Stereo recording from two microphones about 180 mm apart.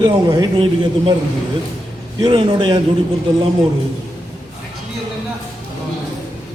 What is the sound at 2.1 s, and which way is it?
Speech, 25° right (ahead or behind).